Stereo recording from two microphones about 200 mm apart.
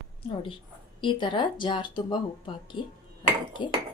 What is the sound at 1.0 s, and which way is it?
Speech, 25° left (ahead or behind).